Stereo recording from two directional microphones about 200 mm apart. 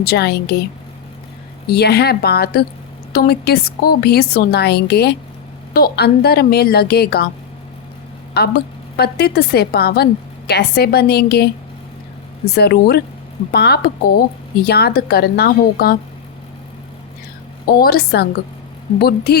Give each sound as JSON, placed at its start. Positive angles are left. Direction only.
{"t": 0.0, "sound": "a woman's voice", "side_deg": 50}
{"t": 1.6, "sound": "a woman's voice", "side_deg": 55}
{"t": 8.3, "sound": "a woman's voice", "side_deg": 50}
{"t": 12.5, "sound": "a woman's voice", "side_deg": 50}
{"t": 17.7, "sound": "a woman's voice", "side_deg": 50}